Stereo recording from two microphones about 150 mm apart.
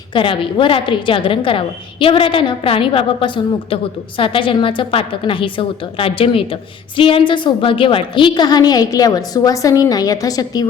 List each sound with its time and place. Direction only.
0.1 s a woman's voice: 35° left (ahead or behind)